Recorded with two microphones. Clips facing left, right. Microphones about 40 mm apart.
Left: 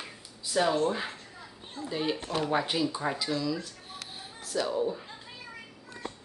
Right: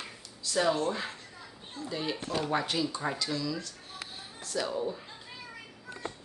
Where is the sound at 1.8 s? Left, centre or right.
Centre.